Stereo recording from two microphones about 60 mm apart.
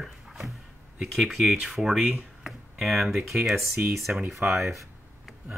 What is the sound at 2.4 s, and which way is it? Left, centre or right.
Tick-tock, centre.